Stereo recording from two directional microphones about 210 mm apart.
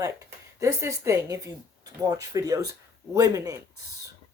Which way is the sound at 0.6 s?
15° right (ahead or behind).